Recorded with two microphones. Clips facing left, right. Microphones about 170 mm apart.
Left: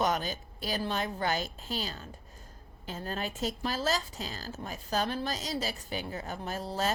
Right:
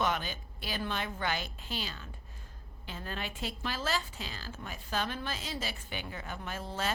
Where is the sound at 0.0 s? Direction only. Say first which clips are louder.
Left 3 dB; 40° left (ahead or behind).